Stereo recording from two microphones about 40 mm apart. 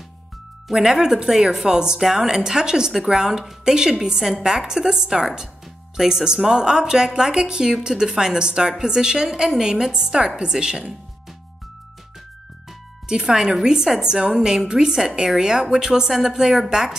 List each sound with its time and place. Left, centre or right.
0.7 s a woman's voice: centre
13.1 s speech: centre